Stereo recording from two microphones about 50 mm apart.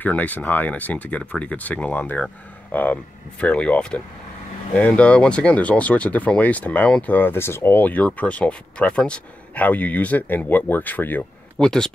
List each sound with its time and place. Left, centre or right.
0.0 s speech: left
3.3 s speech: left
7.3 s speech: left
7.7 s speech: left
9.6 s speech: left
11.5 s speech: centre